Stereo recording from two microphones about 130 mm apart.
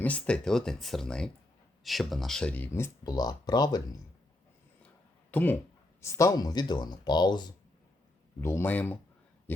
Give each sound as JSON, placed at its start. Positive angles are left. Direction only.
{"t": 0.0, "sound": "speech", "side_deg": 10}
{"t": 5.3, "sound": "speech", "side_deg": 15}
{"t": 8.4, "sound": "speech", "side_deg": 20}